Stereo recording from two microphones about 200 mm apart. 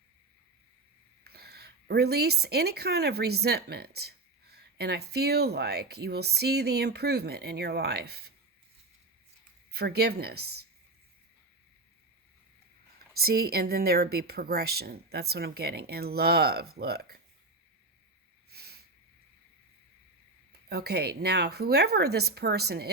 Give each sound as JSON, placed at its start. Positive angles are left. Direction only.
{"t": 1.2, "sound": "speech", "side_deg": -50}
{"t": 9.7, "sound": "speech", "side_deg": -55}
{"t": 13.1, "sound": "speech", "side_deg": -50}
{"t": 18.5, "sound": "a sound", "side_deg": -55}
{"t": 20.5, "sound": "speech", "side_deg": -55}